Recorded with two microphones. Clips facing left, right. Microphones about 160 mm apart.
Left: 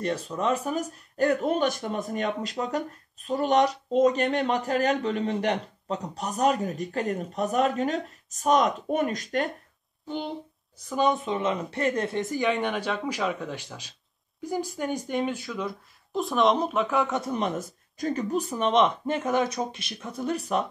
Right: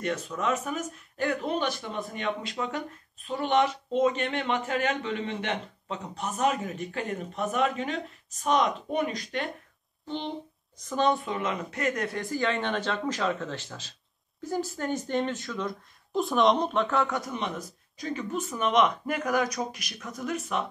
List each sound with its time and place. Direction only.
0.0 s a man's voice: 30° left (ahead or behind)
10.0 s speech: 5° left (ahead or behind)
11.0 s speech: 20° left (ahead or behind)
17.0 s speech: 20° left (ahead or behind)
17.9 s speech: 45° left (ahead or behind)